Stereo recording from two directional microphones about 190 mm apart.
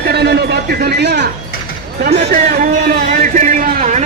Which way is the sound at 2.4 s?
45° right (ahead or behind).